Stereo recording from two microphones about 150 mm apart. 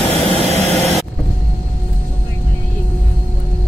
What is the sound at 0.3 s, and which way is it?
Vehicle, 40° left (ahead or behind).